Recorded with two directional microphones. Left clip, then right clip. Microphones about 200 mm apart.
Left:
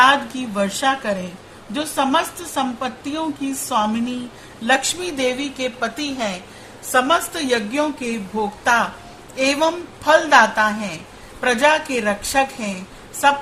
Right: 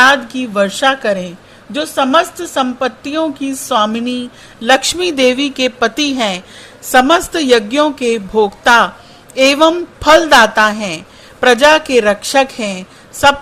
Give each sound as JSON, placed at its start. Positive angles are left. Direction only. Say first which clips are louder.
{"t": 0.0, "sound": "a woman's voice", "louder": "right 5 dB", "side_deg": -25}